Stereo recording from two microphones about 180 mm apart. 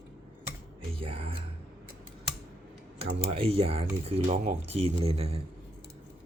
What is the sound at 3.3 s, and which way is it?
Speech, 30° right (ahead or behind).